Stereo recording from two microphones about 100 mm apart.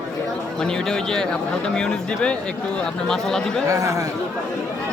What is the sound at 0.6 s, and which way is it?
Speech, 5° left (ahead or behind).